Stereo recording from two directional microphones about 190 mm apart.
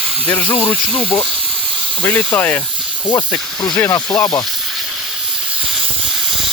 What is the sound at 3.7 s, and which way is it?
Speech, 15° left (ahead or behind).